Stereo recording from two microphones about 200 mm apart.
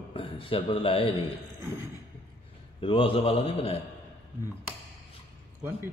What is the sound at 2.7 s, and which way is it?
A man's voice, 25° left (ahead or behind).